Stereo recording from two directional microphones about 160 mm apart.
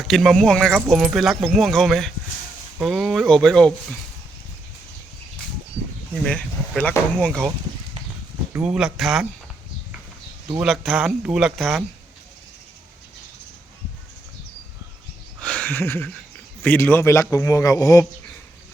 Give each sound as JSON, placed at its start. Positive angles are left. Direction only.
{"t": 0.1, "sound": "speech", "side_deg": 0}
{"t": 6.1, "sound": "speech", "side_deg": 5}
{"t": 8.5, "sound": "speech", "side_deg": -5}
{"t": 10.5, "sound": "speech", "side_deg": -5}
{"t": 15.4, "sound": "a sound", "side_deg": 5}
{"t": 16.6, "sound": "a man's voice", "side_deg": 10}